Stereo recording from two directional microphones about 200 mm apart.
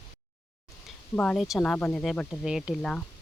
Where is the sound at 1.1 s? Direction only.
5° left (ahead or behind).